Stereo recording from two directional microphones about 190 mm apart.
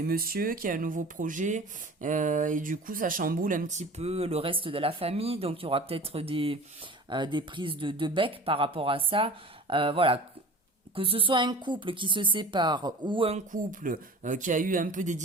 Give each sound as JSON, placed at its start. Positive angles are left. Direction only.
{"t": 0.1, "sound": "speech", "side_deg": -50}
{"t": 13.5, "sound": "speech", "side_deg": -45}